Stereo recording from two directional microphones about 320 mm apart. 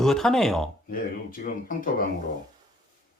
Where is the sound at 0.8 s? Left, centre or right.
Left.